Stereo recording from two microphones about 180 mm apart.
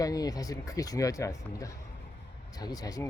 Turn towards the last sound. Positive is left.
turn(degrees=20)  # may be behind; listen again after turning